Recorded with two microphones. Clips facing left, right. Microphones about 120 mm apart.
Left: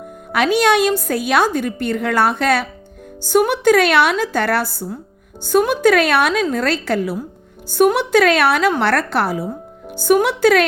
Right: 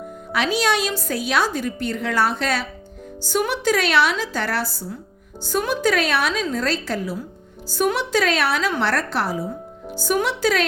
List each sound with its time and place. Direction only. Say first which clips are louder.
0.3 s a woman's voice: left 6 dB; 55° left (ahead or behind)